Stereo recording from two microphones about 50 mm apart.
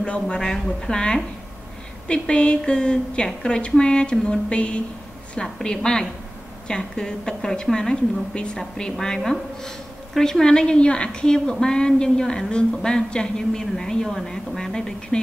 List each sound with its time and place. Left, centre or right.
0.0 s a woman's voice: left